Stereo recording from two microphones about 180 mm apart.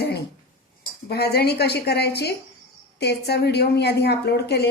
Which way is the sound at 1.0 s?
60° left (ahead or behind).